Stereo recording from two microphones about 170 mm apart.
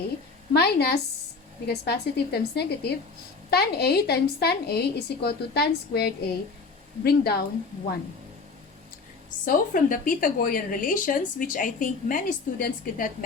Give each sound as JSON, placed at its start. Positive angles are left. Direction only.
{"t": 0.5, "sound": "a woman's voice", "side_deg": 70}
{"t": 9.4, "sound": "speech", "side_deg": 50}